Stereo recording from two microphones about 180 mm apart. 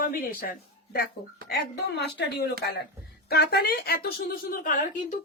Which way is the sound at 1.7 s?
70° left (ahead or behind).